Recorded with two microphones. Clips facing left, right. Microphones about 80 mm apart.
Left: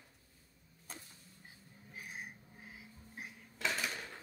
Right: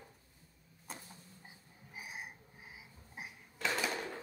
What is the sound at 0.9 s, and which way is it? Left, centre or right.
Creak, centre.